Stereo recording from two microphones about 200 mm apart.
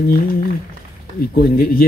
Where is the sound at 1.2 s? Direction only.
50° left (ahead or behind).